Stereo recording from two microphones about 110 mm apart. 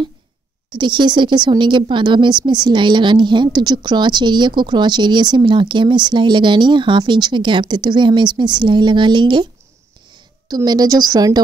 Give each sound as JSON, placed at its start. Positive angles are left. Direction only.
{"t": 0.7, "sound": "a woman's voice", "side_deg": -45}
{"t": 10.5, "sound": "a woman's voice", "side_deg": -35}